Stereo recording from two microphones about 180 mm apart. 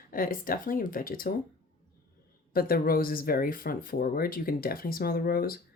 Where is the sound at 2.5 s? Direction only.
55° left (ahead or behind).